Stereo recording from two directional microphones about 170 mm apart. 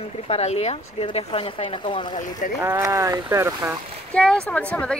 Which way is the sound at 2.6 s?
20° right (ahead or behind).